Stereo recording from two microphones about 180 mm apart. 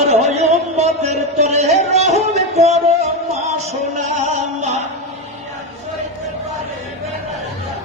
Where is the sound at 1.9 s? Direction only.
35° right (ahead or behind).